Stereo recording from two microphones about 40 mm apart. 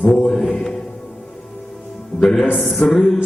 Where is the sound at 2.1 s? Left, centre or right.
Centre.